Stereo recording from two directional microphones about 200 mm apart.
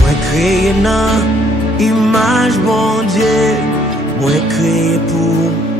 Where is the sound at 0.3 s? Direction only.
Centre (ahead or behind).